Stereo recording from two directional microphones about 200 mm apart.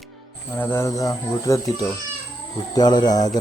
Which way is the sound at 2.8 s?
20° left (ahead or behind).